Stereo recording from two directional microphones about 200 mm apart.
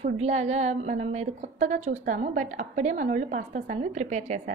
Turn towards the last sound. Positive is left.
turn(degrees=-35)  # may be behind; listen again after turning